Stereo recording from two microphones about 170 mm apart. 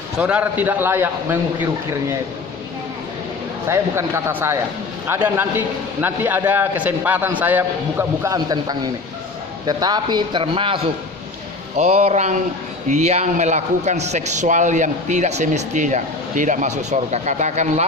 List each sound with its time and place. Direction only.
0.2 s a man's voice: 10° right (ahead or behind)
3.6 s a man's voice: 15° right (ahead or behind); by 17.8 s 45° right (ahead or behind)